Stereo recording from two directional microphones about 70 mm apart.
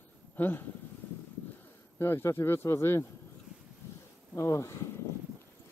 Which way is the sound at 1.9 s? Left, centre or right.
Left.